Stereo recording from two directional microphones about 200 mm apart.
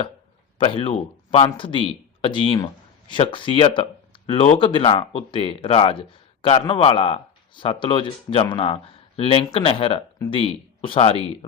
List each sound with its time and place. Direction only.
0.6 s speech: 25° left (ahead or behind)